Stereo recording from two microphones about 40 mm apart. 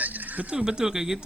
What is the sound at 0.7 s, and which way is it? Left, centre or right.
Speech, centre.